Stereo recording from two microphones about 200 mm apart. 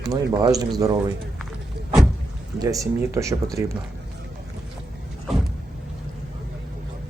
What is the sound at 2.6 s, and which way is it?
Speech, 15° right (ahead or behind).